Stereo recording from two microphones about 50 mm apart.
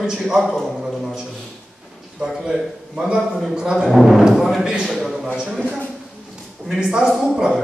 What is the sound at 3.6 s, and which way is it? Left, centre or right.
Speech, centre.